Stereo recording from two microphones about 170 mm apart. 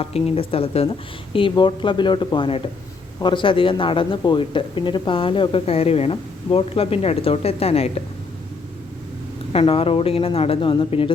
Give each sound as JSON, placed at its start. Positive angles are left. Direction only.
{"t": 0.0, "sound": "speech", "side_deg": 35}
{"t": 9.5, "sound": "speech", "side_deg": 35}